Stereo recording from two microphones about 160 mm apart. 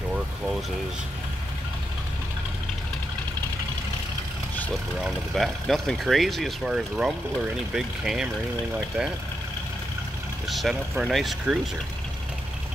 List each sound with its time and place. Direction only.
5.0 s speech: centre (ahead or behind)
10.5 s speech: centre (ahead or behind)